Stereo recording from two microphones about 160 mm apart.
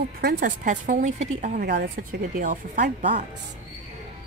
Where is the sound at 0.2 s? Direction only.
65° right (ahead or behind); by 1.3 s 50° right (ahead or behind).